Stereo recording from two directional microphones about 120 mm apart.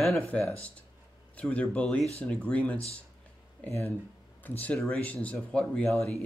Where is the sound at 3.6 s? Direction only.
20° left (ahead or behind); by 5.9 s 5° left (ahead or behind).